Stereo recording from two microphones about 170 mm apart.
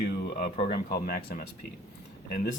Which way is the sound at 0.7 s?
60° left (ahead or behind).